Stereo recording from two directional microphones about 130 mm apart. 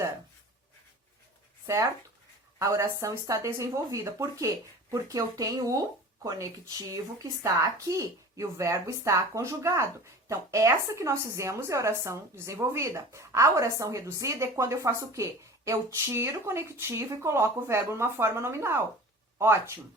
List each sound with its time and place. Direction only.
1.6 s a woman's voice: 25° right (ahead or behind)